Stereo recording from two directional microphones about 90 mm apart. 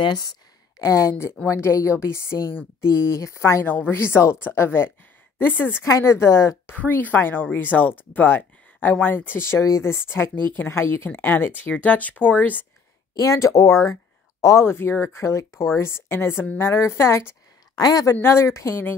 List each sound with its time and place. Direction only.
0.7 s a woman's voice: 35° left (ahead or behind)
6.7 s speech: 20° left (ahead or behind)
13.1 s a woman's voice: 35° left (ahead or behind)
17.7 s speech: 45° left (ahead or behind)
18.1 s speech: 25° left (ahead or behind)